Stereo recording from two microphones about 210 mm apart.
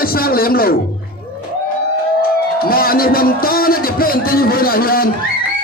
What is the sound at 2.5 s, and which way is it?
A man's voice, 45° left (ahead or behind).